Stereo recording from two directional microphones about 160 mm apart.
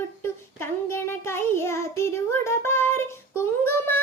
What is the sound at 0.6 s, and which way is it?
Child singing, 15° left (ahead or behind).